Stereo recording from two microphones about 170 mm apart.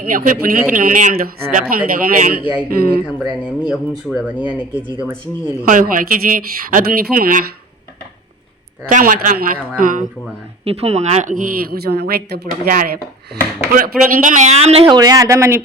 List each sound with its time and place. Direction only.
0.0 s speech: 55° right (ahead or behind)
3.2 s speech: 5° right (ahead or behind)
5.6 s speech: 55° right (ahead or behind)
8.9 s a woman's voice: 50° right (ahead or behind)
10.6 s a woman's voice: 35° right (ahead or behind)
14.9 s a man's voice: 20° right (ahead or behind)